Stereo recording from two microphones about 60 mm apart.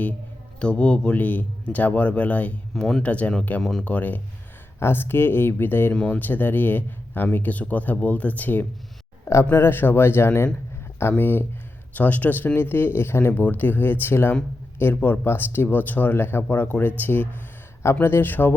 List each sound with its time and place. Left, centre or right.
0.6 s speech: centre
1.1 s speech: left
2.7 s speech: centre
3.0 s speech: left
3.6 s speech: centre
3.8 s speech: left
4.8 s speech: left
5.9 s speech: centre
6.1 s speech: left
9.5 s speech: left